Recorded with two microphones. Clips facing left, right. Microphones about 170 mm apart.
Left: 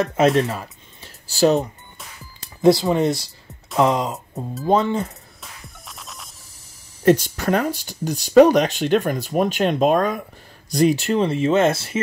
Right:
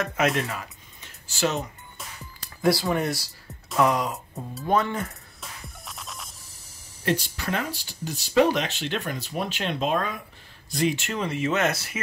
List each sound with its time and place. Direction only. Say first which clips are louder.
0.0 s speech: left 8 dB; 30° left (ahead or behind)
2.4 s speech: left 8 dB; 20° left (ahead or behind)
5.4 s music: right 1 dB; centre (ahead or behind)
7.1 s speech: left 10 dB; 45° left (ahead or behind); by 12.0 s 25° left (ahead or behind)